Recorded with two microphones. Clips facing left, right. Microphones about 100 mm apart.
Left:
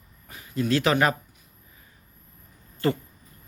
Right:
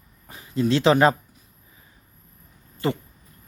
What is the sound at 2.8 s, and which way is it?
Speech, 20° right (ahead or behind).